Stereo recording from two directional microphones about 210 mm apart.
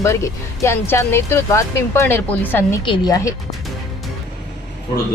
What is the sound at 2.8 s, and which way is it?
Speech, 20° left (ahead or behind).